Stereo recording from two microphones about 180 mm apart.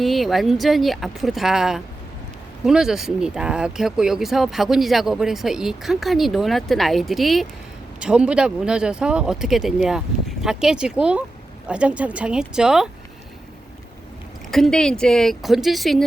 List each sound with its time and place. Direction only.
0.0 s speech: centre (ahead or behind)
14.5 s speech: 5° left (ahead or behind)